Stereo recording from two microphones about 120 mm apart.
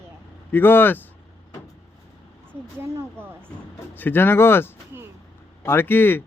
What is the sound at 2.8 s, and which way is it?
Speech, 20° right (ahead or behind).